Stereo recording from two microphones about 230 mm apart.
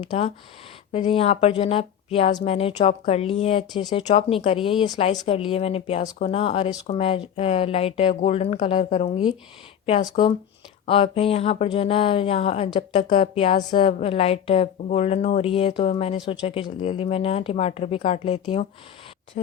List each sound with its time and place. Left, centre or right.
0.1 s speech: left